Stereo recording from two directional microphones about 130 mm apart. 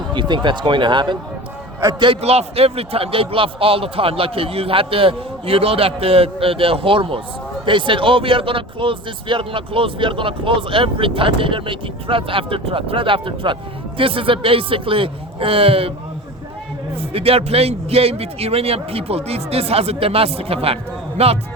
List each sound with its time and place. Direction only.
0.1 s speech: 35° right (ahead or behind)
2.2 s speech: 50° right (ahead or behind)
17.0 s speech: 45° right (ahead or behind)